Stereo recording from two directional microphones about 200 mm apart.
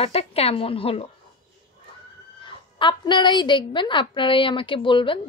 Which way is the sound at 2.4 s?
25° left (ahead or behind).